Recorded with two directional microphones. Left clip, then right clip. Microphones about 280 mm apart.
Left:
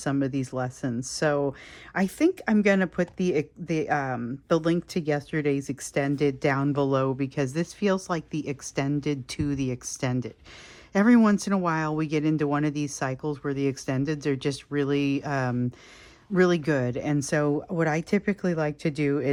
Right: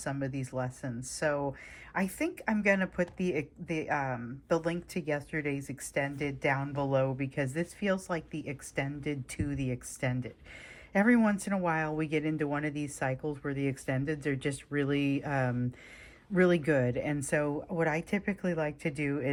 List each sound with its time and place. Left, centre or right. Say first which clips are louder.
0.0 s speech: left 8 dB; centre